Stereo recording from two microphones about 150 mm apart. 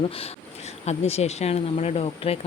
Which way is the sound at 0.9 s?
45° left (ahead or behind).